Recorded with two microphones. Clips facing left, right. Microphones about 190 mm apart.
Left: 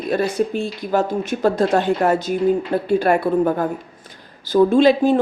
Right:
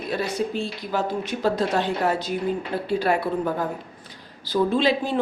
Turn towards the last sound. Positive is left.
turn(degrees=45)  # may be behind; listen again after turning